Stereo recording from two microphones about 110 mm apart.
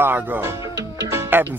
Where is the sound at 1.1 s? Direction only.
20° right (ahead or behind).